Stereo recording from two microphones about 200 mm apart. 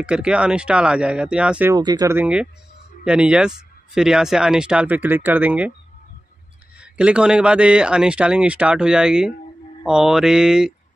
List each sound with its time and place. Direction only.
0.0 s speech: 5° right (ahead or behind)
1.7 s speech: 20° right (ahead or behind)
6.8 s speech: 5° right (ahead or behind)